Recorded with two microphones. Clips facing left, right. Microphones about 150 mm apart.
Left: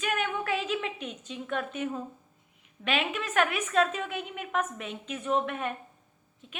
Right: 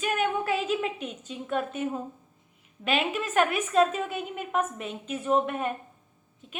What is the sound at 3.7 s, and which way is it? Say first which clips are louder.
Speech: right 4 dB; 35° right (ahead or behind).